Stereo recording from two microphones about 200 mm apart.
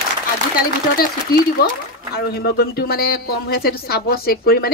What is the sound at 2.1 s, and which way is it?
A woman's voice, 50° left (ahead or behind).